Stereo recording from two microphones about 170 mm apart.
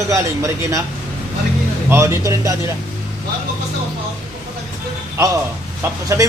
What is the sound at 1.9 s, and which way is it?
Speech, 15° right (ahead or behind).